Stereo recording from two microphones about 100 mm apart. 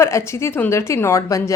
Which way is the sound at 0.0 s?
25° left (ahead or behind).